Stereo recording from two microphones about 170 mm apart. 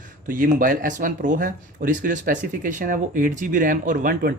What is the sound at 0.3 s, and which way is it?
Speech, 55° right (ahead or behind).